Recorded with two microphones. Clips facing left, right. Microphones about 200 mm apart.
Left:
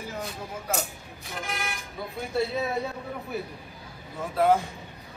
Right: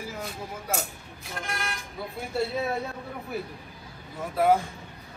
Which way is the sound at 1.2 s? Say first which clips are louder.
Even; centre (ahead or behind).